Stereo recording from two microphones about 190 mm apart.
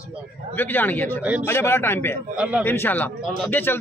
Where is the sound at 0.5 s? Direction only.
10° left (ahead or behind).